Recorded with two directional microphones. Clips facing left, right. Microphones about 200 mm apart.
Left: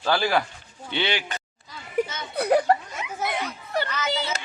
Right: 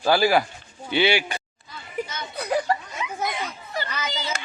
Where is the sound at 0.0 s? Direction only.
10° right (ahead or behind).